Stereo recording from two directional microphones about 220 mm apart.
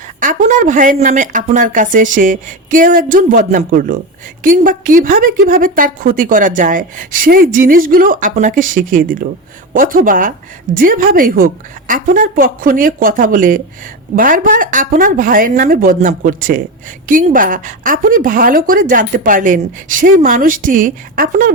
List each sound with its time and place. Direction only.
0.2 s a woman's voice: 35° right (ahead or behind)